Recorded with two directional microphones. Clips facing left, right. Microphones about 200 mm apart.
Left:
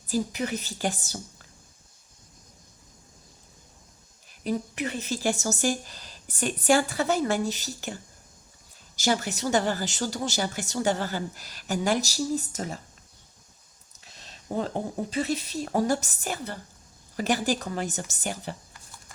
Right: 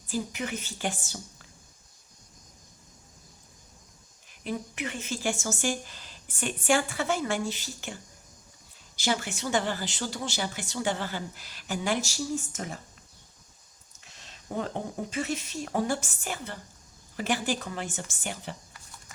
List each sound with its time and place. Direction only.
0.1 s speech: 40° left (ahead or behind)
4.3 s speech: 40° left (ahead or behind)
9.0 s speech: 40° left (ahead or behind)
14.0 s a sound: 35° left (ahead or behind)
15.1 s speech: 35° left (ahead or behind)